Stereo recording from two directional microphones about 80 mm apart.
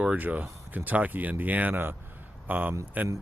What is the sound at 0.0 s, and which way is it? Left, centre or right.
Speech, centre.